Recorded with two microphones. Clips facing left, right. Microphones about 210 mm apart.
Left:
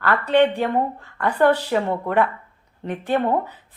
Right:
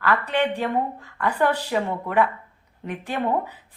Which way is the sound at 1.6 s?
40° left (ahead or behind).